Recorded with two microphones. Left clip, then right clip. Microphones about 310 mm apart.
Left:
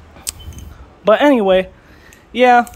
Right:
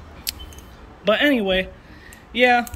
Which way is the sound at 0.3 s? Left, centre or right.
Centre.